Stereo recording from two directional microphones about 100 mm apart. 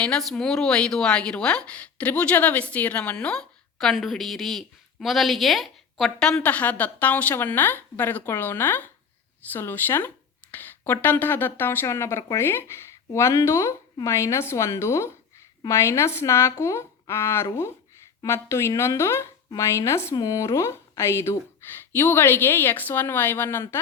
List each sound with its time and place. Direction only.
0.0 s a woman's voice: 5° left (ahead or behind)
6.4 s a woman's voice: 15° left (ahead or behind)
10.5 s a sound: 20° left (ahead or behind)
11.0 s a woman's voice: 20° left (ahead or behind)